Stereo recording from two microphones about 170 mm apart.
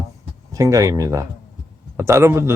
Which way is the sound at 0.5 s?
20° right (ahead or behind).